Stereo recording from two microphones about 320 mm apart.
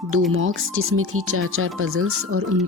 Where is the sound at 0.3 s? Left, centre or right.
Right.